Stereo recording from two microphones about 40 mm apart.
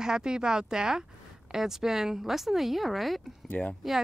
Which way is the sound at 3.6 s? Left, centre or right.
Centre.